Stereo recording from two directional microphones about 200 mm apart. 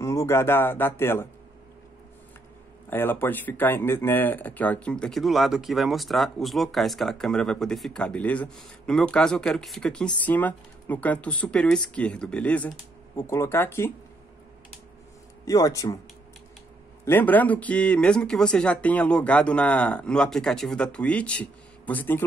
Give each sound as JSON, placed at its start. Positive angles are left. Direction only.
{"t": 0.0, "sound": "speech", "side_deg": 15}
{"t": 2.9, "sound": "speech", "side_deg": 10}
{"t": 15.4, "sound": "speech", "side_deg": 15}
{"t": 17.0, "sound": "speech", "side_deg": 10}